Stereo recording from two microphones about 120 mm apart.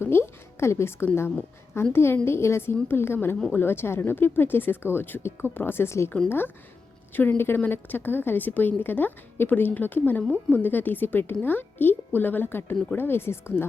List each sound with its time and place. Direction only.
0.0 s a woman's voice: 20° left (ahead or behind)